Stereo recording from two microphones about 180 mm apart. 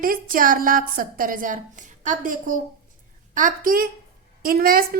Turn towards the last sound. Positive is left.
turn(degrees=-55)  # may be behind; listen again after turning